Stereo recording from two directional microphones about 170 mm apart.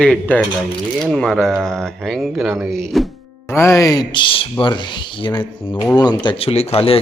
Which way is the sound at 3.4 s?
15° left (ahead or behind).